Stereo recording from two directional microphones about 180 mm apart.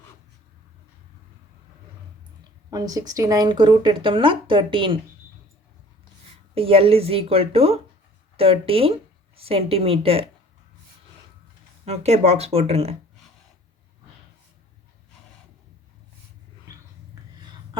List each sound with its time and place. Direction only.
2.6 s a woman's voice: 20° right (ahead or behind)
6.5 s a woman's voice: 30° right (ahead or behind)
11.9 s a woman's voice: 35° right (ahead or behind)